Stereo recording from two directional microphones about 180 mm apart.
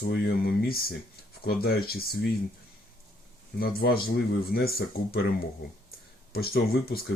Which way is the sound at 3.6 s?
55° left (ahead or behind).